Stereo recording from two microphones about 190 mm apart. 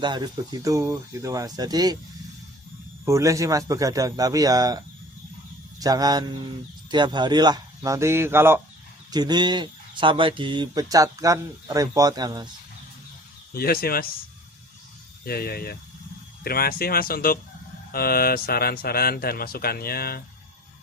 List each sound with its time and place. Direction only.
0.0 s speech: 20° right (ahead or behind)
3.1 s speech: 15° right (ahead or behind)
5.8 s speech: 20° right (ahead or behind)
13.5 s speech: 50° left (ahead or behind)
15.2 s speech: 55° left (ahead or behind)